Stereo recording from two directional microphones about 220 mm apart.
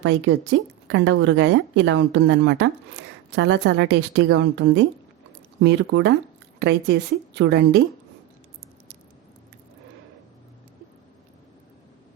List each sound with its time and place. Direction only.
0.0 s speech: 55° right (ahead or behind)